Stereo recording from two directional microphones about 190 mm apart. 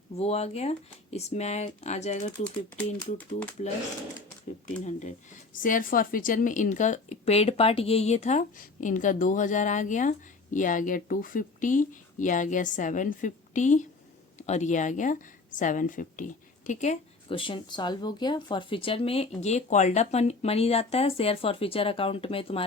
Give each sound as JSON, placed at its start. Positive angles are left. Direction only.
{"t": 0.2, "sound": "speech", "side_deg": 35}
{"t": 3.6, "sound": "speech", "side_deg": 35}